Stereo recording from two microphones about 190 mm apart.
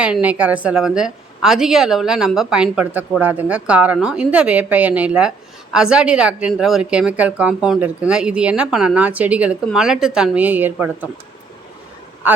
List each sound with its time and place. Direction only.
0.0 s a woman's voice: 5° right (ahead or behind)
12.2 s speech: 10° right (ahead or behind)